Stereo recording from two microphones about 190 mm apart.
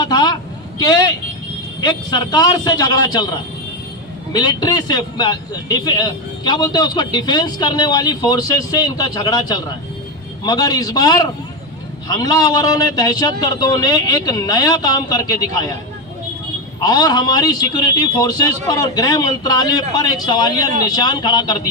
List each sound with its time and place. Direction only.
0.0 s vehicle: 20° left (ahead or behind)
1.8 s a man's voice: 20° left (ahead or behind)
16.8 s a man's voice: 20° left (ahead or behind)